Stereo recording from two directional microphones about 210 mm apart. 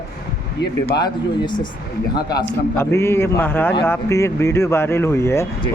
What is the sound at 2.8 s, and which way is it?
Speech, 10° left (ahead or behind).